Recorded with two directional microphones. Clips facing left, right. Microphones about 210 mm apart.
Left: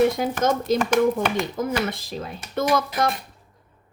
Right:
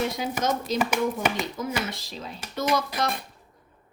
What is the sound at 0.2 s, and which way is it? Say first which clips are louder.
Speech: left 5 dB; 55° left (ahead or behind).